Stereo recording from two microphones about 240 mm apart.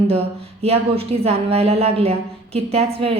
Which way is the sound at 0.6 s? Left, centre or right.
Right.